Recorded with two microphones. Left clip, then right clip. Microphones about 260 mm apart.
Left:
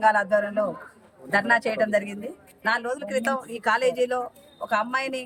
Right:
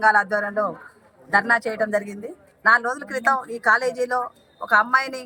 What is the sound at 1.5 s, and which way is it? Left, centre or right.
Speech, centre.